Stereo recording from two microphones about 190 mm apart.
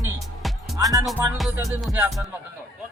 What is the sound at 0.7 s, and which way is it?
Music, 20° right (ahead or behind).